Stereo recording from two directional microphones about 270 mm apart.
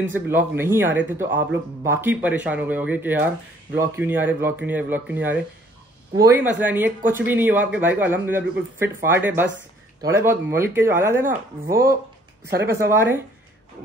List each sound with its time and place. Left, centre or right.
0.1 s a man's voice: centre
12.4 s a woman's voice: right
12.7 s a man's voice: centre